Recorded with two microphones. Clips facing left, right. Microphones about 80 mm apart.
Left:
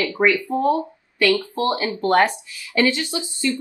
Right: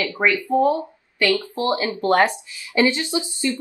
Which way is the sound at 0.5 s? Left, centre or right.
Right.